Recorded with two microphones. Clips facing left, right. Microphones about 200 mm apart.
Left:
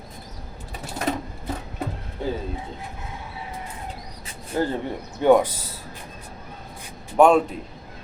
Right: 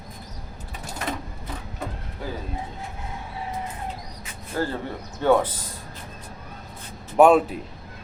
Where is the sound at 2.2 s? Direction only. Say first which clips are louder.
Left 6 dB; 25° left (ahead or behind).